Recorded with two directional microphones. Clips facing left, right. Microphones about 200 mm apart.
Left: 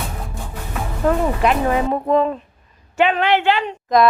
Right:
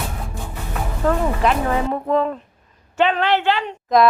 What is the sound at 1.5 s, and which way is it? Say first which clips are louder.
A woman's voice: left 2 dB; 20° left (ahead or behind).